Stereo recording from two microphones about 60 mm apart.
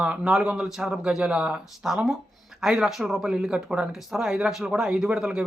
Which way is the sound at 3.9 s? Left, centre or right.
Centre.